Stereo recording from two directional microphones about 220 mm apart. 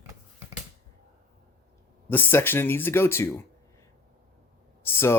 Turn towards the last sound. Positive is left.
turn(degrees=10)  # may be behind; listen again after turning